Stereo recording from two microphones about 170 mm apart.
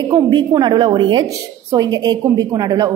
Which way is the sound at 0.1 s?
25° right (ahead or behind).